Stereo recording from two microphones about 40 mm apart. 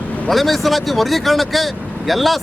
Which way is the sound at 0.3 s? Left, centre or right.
Centre.